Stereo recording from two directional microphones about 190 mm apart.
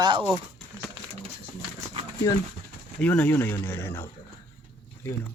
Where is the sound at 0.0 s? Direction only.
25° right (ahead or behind).